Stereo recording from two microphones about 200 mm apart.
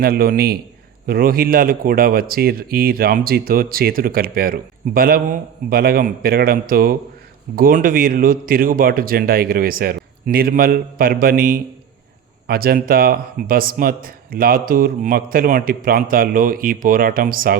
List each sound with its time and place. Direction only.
0.0 s speech: 50° right (ahead or behind)